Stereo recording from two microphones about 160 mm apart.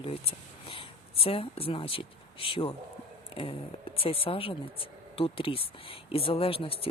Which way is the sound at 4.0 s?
35° left (ahead or behind).